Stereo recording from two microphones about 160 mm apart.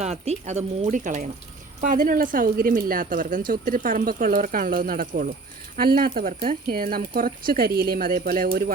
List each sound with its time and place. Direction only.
0.0 s speech: 45° right (ahead or behind); by 8.7 s 65° right (ahead or behind)